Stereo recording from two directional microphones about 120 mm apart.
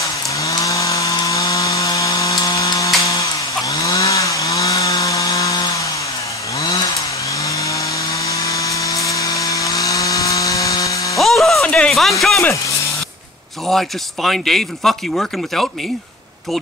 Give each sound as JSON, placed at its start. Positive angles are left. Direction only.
{"t": 0.4, "sound": "chainsaw", "side_deg": 25}
{"t": 7.4, "sound": "chainsaw", "side_deg": 25}
{"t": 10.8, "sound": "power tool", "side_deg": 25}
{"t": 11.1, "sound": "music", "side_deg": 0}
{"t": 13.7, "sound": "speech", "side_deg": 0}